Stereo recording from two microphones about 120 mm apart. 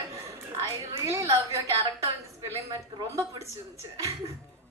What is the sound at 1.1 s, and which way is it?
Speech, 25° right (ahead or behind).